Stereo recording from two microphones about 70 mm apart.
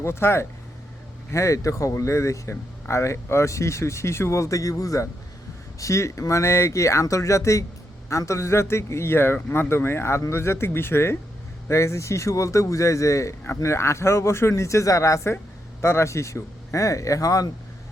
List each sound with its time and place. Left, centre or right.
0.0 s speech: left